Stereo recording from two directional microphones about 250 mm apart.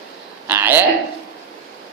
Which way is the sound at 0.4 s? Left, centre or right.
Centre.